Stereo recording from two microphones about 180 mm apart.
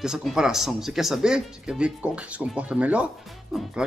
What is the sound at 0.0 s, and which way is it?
Speech, centre (ahead or behind).